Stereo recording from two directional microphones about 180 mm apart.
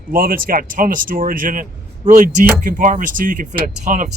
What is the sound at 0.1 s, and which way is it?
Speech, 50° right (ahead or behind).